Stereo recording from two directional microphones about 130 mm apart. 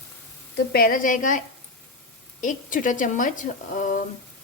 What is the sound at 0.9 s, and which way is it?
Speech, 90° left.